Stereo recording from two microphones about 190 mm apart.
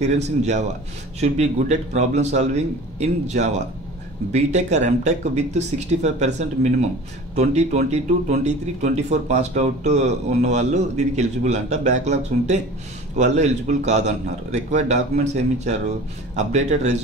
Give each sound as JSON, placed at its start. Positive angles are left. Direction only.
{"t": 0.0, "sound": "speech", "side_deg": -35}